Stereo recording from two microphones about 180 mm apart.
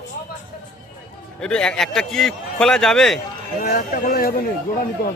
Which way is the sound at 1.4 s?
5° left (ahead or behind).